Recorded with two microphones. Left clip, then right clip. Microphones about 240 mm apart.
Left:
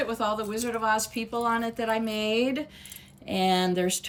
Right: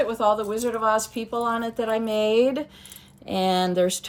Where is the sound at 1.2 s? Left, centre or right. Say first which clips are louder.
Right 2 dB; centre.